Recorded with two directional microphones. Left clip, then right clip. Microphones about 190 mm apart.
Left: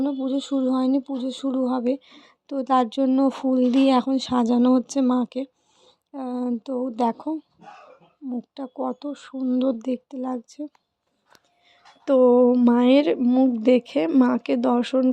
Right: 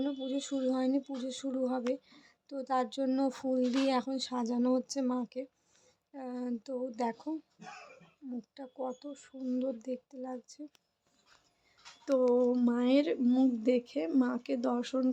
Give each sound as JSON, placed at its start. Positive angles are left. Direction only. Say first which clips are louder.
{"t": 0.0, "sound": "speech", "louder": "left 10 dB", "side_deg": 25}
{"t": 8.5, "sound": "speech", "louder": "left 10 dB", "side_deg": 35}
{"t": 12.0, "sound": "a sound", "louder": "left 12 dB", "side_deg": 35}
{"t": 12.6, "sound": "speech", "louder": "left 11 dB", "side_deg": 40}